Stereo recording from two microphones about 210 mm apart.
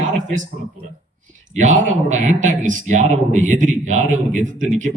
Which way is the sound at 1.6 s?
35° right (ahead or behind).